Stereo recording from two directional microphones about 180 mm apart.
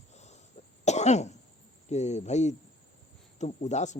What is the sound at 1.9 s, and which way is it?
Speech, 40° left (ahead or behind).